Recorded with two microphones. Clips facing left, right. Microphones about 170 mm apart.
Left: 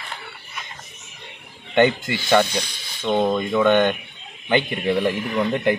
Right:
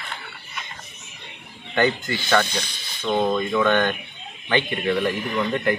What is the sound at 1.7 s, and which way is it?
Speech, 20° left (ahead or behind).